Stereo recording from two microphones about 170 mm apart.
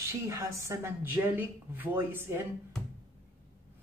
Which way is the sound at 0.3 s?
20° right (ahead or behind).